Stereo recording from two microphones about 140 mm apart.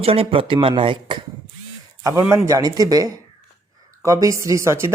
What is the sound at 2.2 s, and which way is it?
A woman's voice, 20° right (ahead or behind).